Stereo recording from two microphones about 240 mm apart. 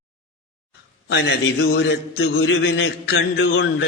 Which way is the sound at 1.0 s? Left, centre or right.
Left.